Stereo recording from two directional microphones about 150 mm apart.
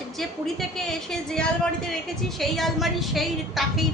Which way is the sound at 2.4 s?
Centre (ahead or behind).